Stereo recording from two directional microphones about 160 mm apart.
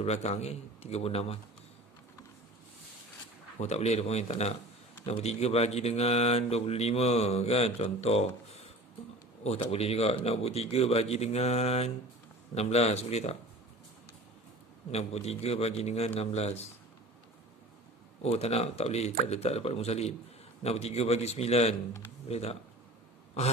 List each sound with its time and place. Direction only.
0.0 s speech: 40° left (ahead or behind)
3.5 s a man's voice: 45° left (ahead or behind)
14.9 s speech: 40° left (ahead or behind)
18.2 s speech: 40° left (ahead or behind)